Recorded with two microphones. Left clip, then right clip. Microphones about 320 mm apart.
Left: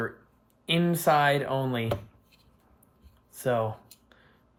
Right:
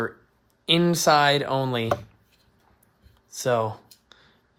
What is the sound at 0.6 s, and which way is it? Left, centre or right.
Speech, right.